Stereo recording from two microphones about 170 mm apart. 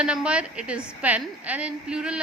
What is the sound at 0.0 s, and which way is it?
A woman's voice, 5° right (ahead or behind).